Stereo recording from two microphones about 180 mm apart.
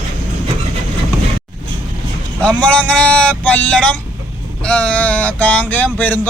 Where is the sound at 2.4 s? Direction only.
5° left (ahead or behind).